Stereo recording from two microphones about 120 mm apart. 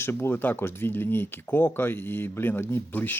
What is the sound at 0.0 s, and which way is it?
Speech, 20° left (ahead or behind).